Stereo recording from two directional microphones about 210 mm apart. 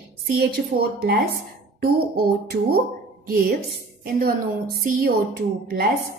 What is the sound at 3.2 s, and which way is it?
A woman's voice, 45° right (ahead or behind).